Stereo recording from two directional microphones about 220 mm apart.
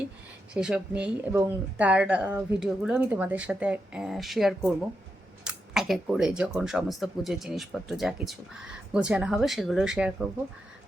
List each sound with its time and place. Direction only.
0.5 s speech: 5° right (ahead or behind)